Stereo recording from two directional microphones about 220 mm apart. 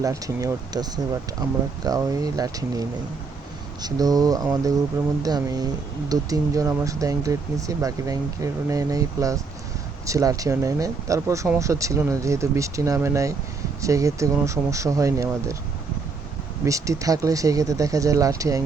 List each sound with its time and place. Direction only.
0.0 s speech: 15° right (ahead or behind)
3.8 s speech: 15° right (ahead or behind)
16.6 s speech: 15° right (ahead or behind)